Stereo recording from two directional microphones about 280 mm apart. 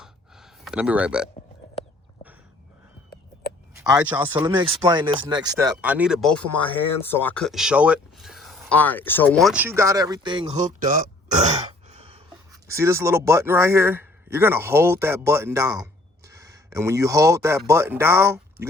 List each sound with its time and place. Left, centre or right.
0.0 s gasp: centre
3.8 s speech: centre
4.4 s a man's voice: centre
12.6 s a man's voice: centre